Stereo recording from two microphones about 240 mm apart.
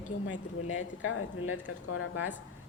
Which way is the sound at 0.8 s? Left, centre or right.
Left.